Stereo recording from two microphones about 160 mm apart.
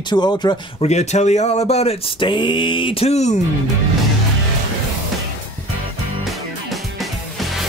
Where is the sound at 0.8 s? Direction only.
45° left (ahead or behind).